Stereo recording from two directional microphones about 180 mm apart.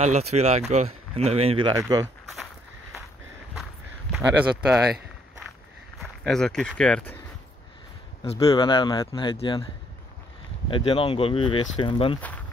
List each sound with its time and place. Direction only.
0.0 s speech: 35° right (ahead or behind)
1.7 s speech: 20° right (ahead or behind)
4.1 s speech: 5° right (ahead or behind)
5.9 s speech: 5° left (ahead or behind)
8.5 s speech: 30° left (ahead or behind)
10.7 s speech: 30° left (ahead or behind)